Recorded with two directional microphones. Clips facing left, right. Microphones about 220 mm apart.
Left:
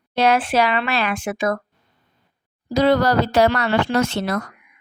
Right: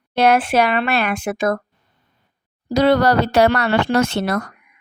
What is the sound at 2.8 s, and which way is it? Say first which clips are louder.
Speech: right 2 dB; 65° right (ahead or behind).